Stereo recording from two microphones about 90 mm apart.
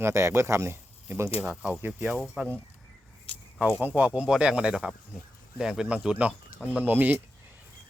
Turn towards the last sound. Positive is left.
turn(degrees=-20)  # may be behind; listen again after turning